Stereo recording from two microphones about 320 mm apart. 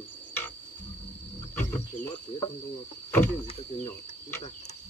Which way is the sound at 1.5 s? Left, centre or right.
Centre.